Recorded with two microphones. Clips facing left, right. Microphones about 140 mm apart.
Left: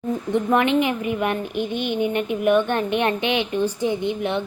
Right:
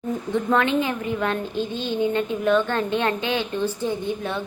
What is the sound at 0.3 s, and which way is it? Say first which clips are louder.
A woman's voice: left 2 dB; 20° left (ahead or behind).